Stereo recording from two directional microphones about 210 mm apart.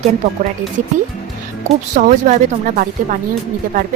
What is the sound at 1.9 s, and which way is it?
Speech, 40° right (ahead or behind).